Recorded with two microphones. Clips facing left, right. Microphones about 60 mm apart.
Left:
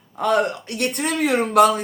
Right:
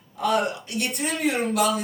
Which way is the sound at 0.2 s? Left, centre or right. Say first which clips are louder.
Left 4 dB; left.